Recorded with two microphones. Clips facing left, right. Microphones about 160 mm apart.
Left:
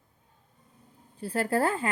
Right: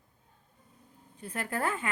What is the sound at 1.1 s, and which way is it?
Speech, 35° left (ahead or behind).